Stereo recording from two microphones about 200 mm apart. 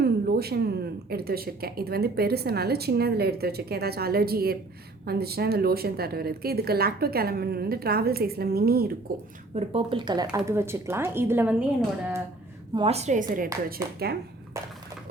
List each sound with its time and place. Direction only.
0.0 s speech: 50° right (ahead or behind)
9.6 s speech: 30° right (ahead or behind); by 11.5 s 10° right (ahead or behind)
12.7 s a woman's voice: 30° right (ahead or behind); by 14.2 s 50° right (ahead or behind)